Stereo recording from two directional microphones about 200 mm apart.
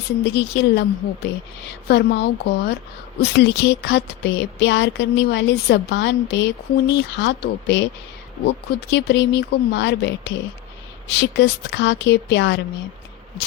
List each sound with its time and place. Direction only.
0.3 s speech: 60° left (ahead or behind)